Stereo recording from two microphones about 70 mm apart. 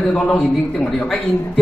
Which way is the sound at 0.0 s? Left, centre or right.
Centre.